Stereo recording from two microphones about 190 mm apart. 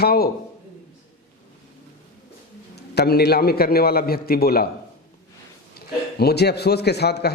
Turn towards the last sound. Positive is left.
turn(degrees=60)  # may be behind; listen again after turning